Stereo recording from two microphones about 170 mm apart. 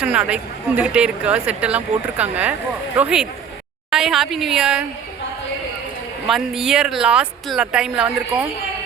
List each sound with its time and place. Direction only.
0.0 s speech: 5° right (ahead or behind)
6.2 s speech: centre (ahead or behind)